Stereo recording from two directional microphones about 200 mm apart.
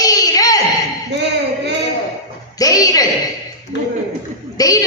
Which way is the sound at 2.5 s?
20° left (ahead or behind).